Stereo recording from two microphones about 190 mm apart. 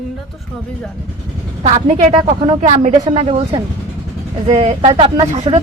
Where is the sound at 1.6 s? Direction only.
40° right (ahead or behind).